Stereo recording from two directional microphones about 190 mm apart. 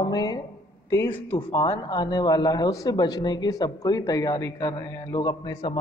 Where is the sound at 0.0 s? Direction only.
20° left (ahead or behind).